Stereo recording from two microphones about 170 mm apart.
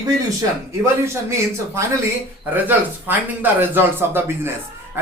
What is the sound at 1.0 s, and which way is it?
Speech, 15° right (ahead or behind).